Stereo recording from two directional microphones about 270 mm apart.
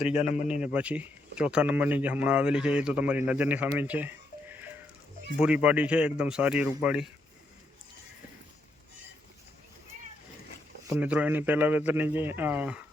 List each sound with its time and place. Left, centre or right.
0.1 s a man's voice: left
0.6 s speech: centre
3.8 s music: centre
5.4 s speech: centre
10.8 s speech: centre